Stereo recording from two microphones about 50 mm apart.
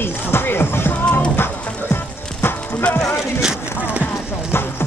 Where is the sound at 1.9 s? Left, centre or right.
Left.